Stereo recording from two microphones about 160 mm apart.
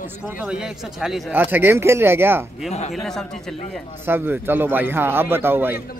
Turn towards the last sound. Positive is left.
turn(degrees=-15)  # may be behind; listen again after turning